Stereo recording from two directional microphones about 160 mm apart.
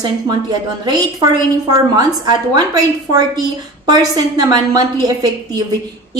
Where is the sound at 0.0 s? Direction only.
25° right (ahead or behind).